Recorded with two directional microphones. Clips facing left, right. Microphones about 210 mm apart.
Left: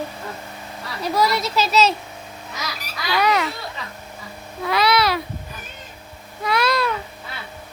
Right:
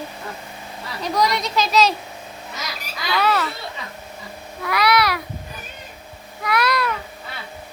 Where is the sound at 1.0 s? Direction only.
5° left (ahead or behind).